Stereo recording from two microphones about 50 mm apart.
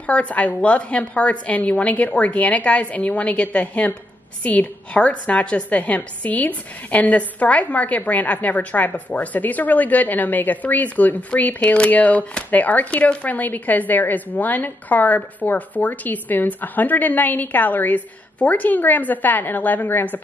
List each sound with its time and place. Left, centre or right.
0.0 s a woman's voice: left